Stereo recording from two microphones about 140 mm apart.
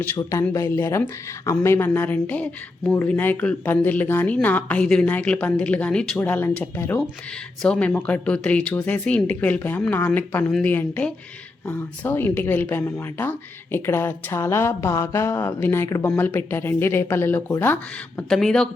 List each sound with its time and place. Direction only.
0.2 s speech: 20° left (ahead or behind)
18.3 s speech: 5° left (ahead or behind)